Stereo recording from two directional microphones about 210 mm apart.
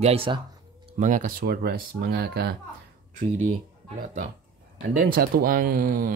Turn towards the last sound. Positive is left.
turn(degrees=-45)  # may be behind; listen again after turning